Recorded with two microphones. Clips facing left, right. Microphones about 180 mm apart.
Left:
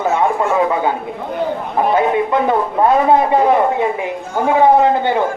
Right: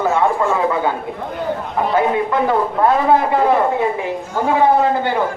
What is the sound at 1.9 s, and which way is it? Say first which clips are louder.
A man's voice: even; 20° left (ahead or behind).